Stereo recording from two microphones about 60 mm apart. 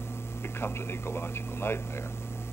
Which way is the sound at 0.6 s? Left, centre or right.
Left.